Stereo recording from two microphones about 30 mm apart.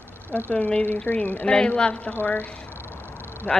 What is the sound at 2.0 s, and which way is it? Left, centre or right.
Speech, left.